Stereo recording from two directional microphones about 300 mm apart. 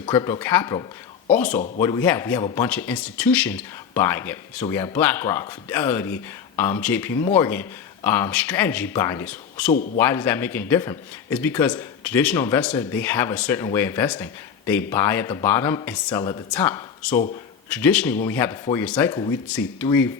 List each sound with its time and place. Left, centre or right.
0.0 s a man's voice: centre